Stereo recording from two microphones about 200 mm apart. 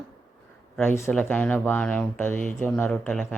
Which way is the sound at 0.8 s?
10° left (ahead or behind).